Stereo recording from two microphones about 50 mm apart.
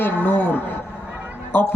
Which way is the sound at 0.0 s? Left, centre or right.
Left.